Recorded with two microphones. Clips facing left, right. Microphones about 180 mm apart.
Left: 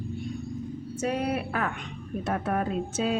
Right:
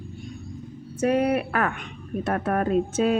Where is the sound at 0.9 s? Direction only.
60° right (ahead or behind).